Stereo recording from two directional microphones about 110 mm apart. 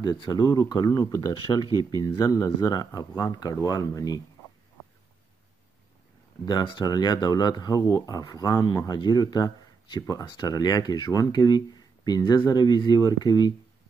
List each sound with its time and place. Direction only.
0.0 s speech: 40° left (ahead or behind)
6.4 s speech: 40° left (ahead or behind)